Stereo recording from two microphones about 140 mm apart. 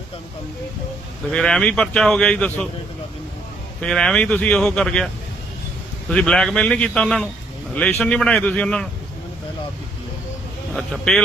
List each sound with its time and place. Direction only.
1.3 s speech: 5° left (ahead or behind)
3.8 s a man's voice: 5° left (ahead or behind)
10.8 s speech: centre (ahead or behind)